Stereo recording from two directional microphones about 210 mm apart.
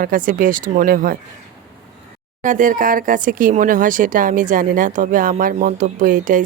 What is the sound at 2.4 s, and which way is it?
Speech, 40° right (ahead or behind).